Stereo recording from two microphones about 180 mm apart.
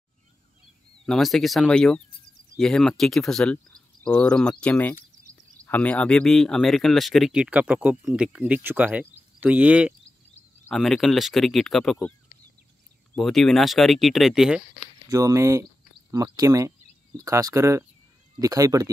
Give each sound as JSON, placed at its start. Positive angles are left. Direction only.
{"t": 1.0, "sound": "speech", "side_deg": 0}
{"t": 13.1, "sound": "speech", "side_deg": 0}
{"t": 15.0, "sound": "speech", "side_deg": -20}